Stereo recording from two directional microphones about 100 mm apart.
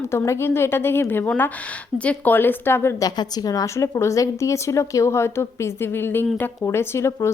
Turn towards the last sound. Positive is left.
turn(degrees=25)  # may be behind; listen again after turning